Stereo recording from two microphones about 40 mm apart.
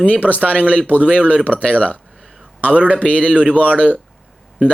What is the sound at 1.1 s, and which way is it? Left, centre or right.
Speech, right.